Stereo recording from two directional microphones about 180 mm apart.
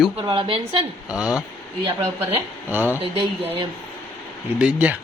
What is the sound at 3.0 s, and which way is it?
Speech, 30° right (ahead or behind).